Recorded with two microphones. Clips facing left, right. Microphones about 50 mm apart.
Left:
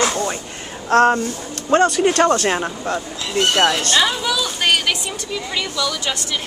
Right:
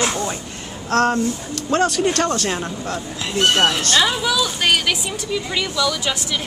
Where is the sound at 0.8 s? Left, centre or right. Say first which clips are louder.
Left 3 dB; left.